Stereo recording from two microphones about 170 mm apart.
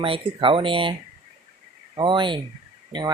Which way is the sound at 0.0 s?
30° right (ahead or behind).